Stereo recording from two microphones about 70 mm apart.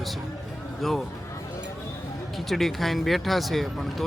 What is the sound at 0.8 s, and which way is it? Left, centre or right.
Speech, centre.